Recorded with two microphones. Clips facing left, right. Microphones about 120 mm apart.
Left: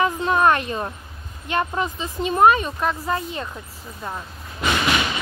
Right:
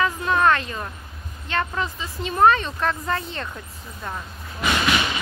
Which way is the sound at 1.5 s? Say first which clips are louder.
Left 3 dB; 20° left (ahead or behind).